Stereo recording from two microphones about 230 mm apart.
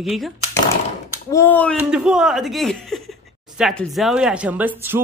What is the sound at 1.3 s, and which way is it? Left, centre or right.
Speech, centre.